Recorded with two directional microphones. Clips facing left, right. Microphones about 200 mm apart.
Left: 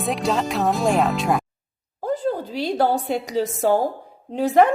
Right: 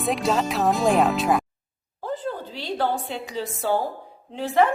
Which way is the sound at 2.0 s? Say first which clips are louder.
Left 6 dB; 40° left (ahead or behind).